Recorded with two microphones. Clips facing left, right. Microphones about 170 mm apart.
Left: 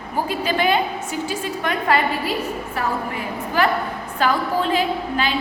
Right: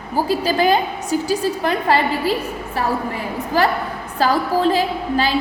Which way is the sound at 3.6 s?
35° right (ahead or behind).